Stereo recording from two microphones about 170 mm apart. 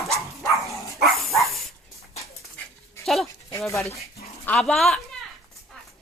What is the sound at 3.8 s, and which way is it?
Speech, 40° left (ahead or behind).